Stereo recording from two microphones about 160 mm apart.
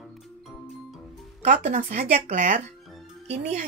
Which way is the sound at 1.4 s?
45° right (ahead or behind).